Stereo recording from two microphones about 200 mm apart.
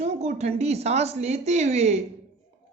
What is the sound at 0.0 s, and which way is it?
Speech, 35° right (ahead or behind).